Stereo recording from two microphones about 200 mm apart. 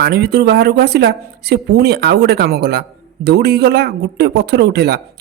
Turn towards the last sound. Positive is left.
turn(degrees=-55)  # may be behind; listen again after turning